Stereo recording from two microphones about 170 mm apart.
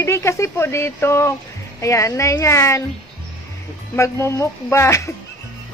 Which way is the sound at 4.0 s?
15° left (ahead or behind).